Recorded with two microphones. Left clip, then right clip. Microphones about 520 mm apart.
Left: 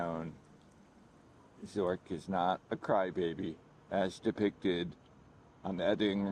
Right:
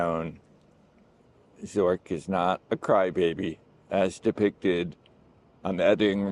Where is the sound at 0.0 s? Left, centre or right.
Right.